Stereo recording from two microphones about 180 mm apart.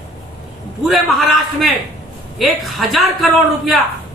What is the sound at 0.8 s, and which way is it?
A man's voice, centre (ahead or behind).